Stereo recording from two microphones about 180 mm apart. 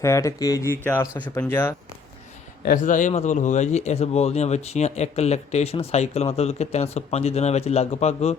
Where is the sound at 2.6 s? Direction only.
45° left (ahead or behind).